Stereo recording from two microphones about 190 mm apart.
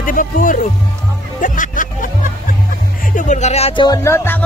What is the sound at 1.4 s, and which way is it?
Music, 45° left (ahead or behind).